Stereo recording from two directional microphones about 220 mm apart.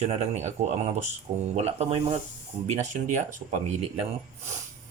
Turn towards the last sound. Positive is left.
turn(degrees=-30)  # may be behind; listen again after turning